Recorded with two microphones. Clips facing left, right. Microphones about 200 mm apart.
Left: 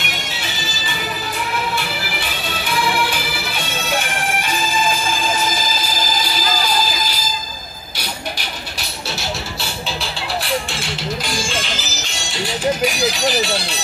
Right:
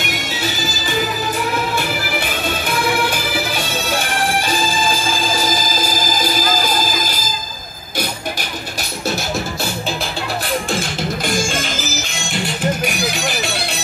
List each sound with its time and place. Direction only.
0.0 s music: 40° right (ahead or behind)